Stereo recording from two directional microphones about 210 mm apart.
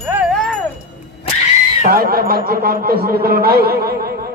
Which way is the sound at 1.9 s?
45° right (ahead or behind).